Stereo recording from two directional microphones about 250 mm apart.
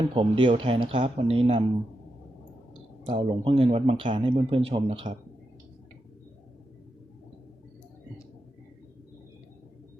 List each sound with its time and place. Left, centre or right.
0.1 s speech: right
3.1 s speech: right